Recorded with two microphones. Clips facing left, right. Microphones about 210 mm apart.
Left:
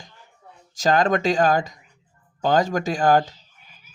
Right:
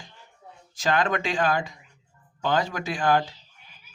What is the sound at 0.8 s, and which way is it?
Speech, 40° left (ahead or behind).